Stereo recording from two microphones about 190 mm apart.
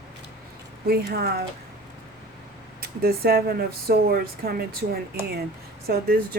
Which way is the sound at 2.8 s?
55° right (ahead or behind).